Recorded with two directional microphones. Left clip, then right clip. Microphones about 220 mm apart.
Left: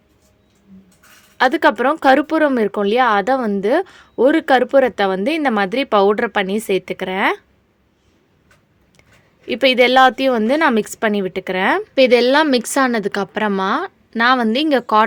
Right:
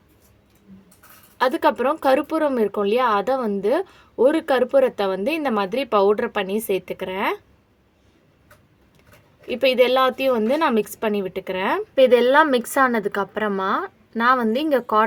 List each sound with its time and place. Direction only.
1.4 s speech: 35° left (ahead or behind)
9.5 s speech: 35° left (ahead or behind)